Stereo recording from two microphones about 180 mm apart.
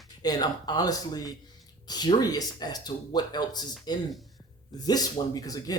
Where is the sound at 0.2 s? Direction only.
20° left (ahead or behind).